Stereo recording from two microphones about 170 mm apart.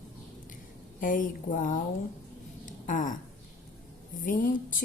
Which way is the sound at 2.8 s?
50° left (ahead or behind).